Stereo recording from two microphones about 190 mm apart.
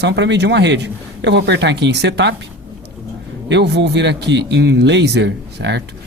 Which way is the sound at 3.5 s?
65° right (ahead or behind).